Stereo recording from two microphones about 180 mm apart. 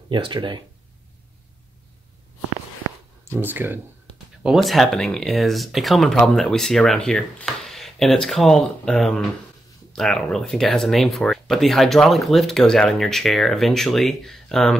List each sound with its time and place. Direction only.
0.1 s speech: 25° right (ahead or behind)
3.3 s speech: 10° right (ahead or behind)